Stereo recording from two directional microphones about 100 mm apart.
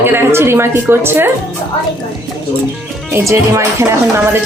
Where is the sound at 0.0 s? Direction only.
25° right (ahead or behind).